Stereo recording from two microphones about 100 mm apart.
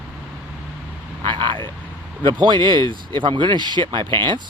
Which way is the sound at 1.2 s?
55° right (ahead or behind).